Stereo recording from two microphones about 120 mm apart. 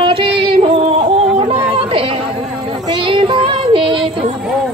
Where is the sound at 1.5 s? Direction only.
50° right (ahead or behind).